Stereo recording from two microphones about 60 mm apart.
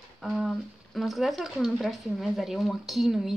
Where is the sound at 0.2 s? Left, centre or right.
Centre.